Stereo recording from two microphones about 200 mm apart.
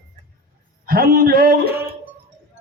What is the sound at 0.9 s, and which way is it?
Speech, 45° right (ahead or behind).